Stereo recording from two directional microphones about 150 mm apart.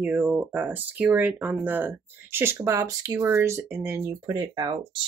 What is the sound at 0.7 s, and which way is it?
Speech, 10° right (ahead or behind).